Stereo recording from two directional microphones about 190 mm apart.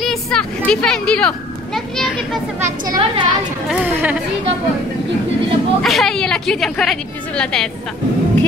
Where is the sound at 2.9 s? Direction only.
25° right (ahead or behind).